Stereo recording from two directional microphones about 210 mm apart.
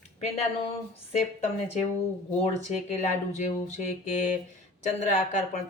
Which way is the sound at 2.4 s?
30° left (ahead or behind).